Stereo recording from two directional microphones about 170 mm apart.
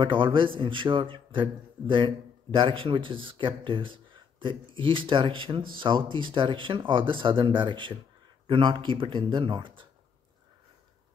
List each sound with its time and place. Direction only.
0.0 s a man's voice: 30° right (ahead or behind)